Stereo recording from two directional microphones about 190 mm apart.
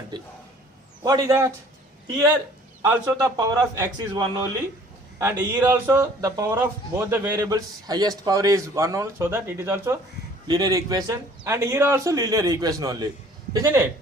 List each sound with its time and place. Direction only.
0.1 s speech: 25° right (ahead or behind)